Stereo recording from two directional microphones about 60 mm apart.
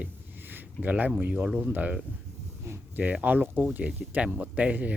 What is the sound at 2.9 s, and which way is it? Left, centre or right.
Speech, right.